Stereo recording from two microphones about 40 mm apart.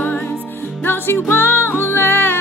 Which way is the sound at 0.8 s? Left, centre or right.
Left.